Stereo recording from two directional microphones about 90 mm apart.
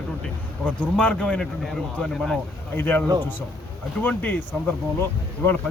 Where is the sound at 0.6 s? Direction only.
15° left (ahead or behind).